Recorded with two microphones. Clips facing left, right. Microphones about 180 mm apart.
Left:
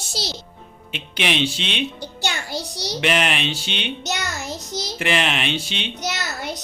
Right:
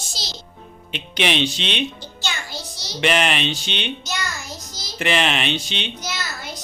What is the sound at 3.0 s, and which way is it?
Speech, 5° left (ahead or behind).